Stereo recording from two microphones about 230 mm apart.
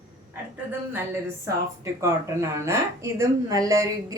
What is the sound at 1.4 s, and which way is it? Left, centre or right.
A woman's voice, centre.